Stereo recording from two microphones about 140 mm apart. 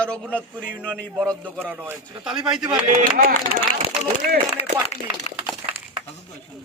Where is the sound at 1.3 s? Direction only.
15° right (ahead or behind).